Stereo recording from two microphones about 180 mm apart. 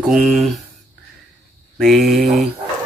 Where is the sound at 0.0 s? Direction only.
5° right (ahead or behind).